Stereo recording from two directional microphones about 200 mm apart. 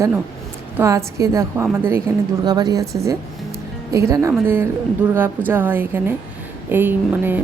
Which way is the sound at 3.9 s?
15° right (ahead or behind).